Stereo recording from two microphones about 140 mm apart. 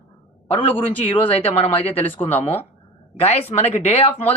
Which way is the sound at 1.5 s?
45° left (ahead or behind).